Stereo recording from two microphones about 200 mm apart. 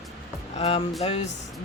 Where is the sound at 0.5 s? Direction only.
30° left (ahead or behind).